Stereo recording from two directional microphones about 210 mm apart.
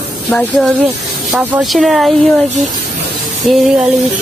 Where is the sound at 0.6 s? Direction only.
Centre (ahead or behind).